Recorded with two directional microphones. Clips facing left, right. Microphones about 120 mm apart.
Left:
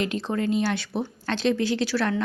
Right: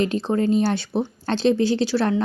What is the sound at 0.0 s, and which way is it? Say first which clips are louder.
Speech: right 5 dB; 30° right (ahead or behind).